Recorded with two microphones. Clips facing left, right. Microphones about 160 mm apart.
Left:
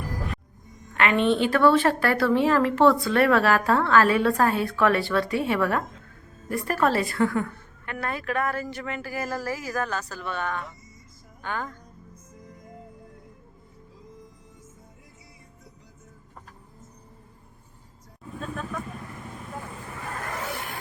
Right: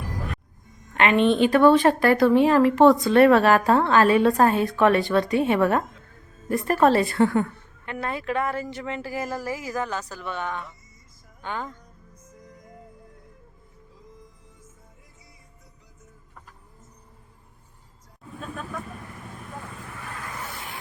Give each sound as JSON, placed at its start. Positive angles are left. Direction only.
{"t": 0.9, "sound": "a woman's voice", "side_deg": -20}